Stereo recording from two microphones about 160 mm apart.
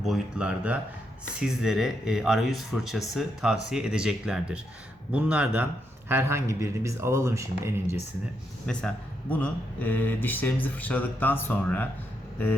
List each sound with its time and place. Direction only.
0.0 s speech: 5° right (ahead or behind)
8.6 s speech: 5° left (ahead or behind)